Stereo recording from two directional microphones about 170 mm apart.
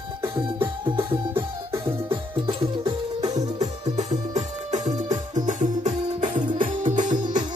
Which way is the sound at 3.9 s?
40° right (ahead or behind).